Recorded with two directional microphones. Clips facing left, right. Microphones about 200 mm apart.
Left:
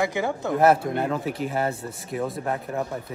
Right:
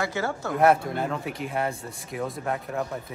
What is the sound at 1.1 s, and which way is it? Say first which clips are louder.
Speech: left 3 dB; centre (ahead or behind).